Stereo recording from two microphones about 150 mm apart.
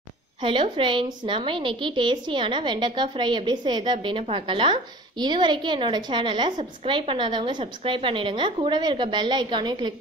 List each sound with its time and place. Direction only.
0.4 s a woman's voice: 35° right (ahead or behind)